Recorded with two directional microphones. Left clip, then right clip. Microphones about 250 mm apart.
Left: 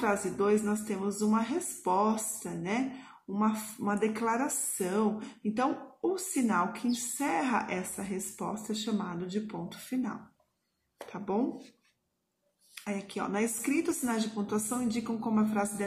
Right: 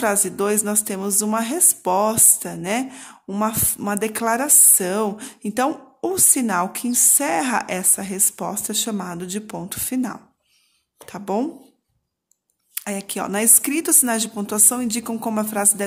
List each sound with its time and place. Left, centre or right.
0.0 s speech: right
12.7 s speech: right